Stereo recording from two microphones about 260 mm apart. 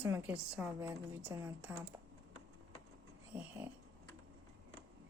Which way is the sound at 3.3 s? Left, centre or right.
Centre.